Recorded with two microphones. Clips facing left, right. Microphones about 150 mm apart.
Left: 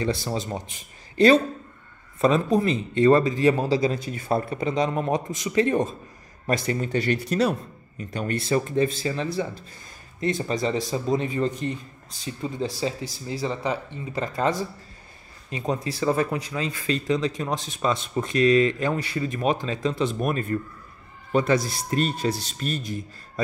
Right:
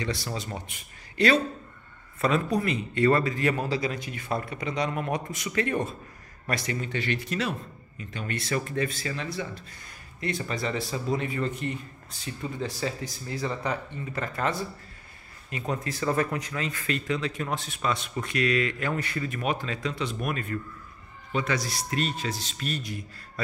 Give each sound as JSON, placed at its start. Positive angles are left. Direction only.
{"t": 0.0, "sound": "speech", "side_deg": 30}
{"t": 8.5, "sound": "speech", "side_deg": 30}
{"t": 10.6, "sound": "a man's voice", "side_deg": 25}